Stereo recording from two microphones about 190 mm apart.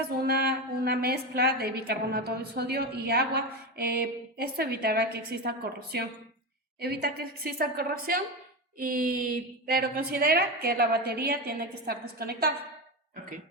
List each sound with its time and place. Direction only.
0.2 s a woman's voice: 55° right (ahead or behind)